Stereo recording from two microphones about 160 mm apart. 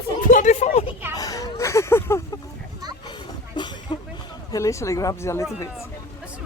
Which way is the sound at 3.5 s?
30° left (ahead or behind).